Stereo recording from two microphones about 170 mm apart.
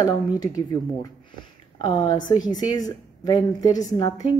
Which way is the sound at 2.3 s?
20° left (ahead or behind).